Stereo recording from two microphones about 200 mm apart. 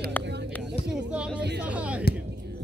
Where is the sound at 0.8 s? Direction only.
5° right (ahead or behind).